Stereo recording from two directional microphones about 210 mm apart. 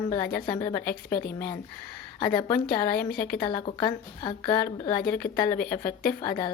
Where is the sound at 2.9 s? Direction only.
50° left (ahead or behind).